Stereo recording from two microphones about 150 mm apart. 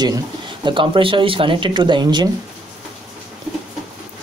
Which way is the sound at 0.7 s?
35° right (ahead or behind).